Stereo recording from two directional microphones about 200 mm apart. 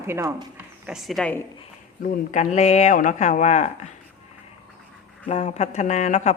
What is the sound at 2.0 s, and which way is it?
Speech, 40° left (ahead or behind).